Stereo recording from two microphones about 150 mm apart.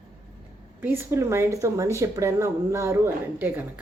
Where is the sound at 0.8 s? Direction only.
15° right (ahead or behind).